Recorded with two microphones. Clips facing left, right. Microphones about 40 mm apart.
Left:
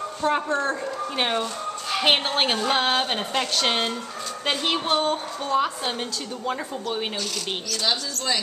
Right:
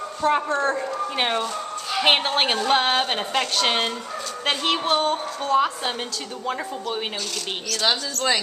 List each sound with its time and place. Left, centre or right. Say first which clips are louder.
0.2 s a sound: right 2 dB; centre
6.4 s speech: right 1 dB; centre
7.8 s speech: right 4 dB; right